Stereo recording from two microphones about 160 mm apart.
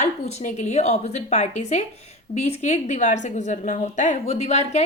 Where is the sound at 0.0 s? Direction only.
45° left (ahead or behind).